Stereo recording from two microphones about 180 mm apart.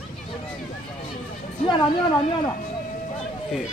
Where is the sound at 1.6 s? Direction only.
25° left (ahead or behind).